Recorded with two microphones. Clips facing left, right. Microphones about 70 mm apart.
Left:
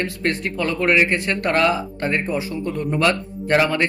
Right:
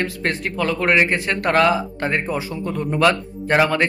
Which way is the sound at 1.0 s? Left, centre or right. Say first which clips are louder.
Right 1 dB; centre.